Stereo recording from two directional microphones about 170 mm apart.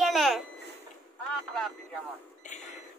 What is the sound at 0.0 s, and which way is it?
Babbling, centre (ahead or behind).